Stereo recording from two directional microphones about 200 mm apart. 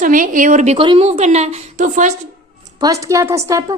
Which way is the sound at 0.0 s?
40° right (ahead or behind).